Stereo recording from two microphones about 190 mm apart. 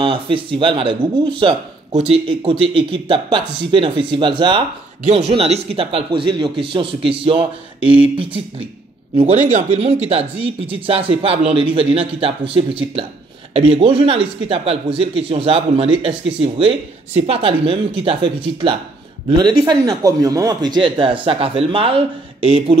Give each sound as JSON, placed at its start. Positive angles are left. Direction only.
{"t": 0.0, "sound": "speech", "side_deg": -30}
{"t": 9.1, "sound": "speech", "side_deg": -35}